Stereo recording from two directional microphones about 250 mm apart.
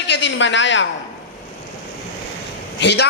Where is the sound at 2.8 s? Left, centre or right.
Left.